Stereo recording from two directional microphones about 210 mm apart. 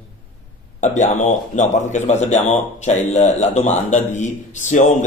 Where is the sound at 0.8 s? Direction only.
35° left (ahead or behind).